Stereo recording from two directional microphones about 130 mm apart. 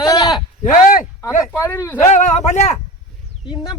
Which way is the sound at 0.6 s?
80° left.